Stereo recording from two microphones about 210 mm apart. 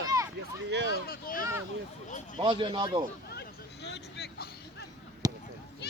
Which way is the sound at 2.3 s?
25° right (ahead or behind).